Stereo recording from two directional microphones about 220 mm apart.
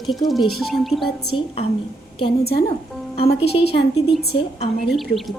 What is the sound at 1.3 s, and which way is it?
Speech, 25° left (ahead or behind).